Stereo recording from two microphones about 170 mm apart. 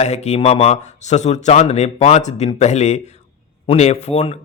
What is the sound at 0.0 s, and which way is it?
A man's voice, 40° left (ahead or behind).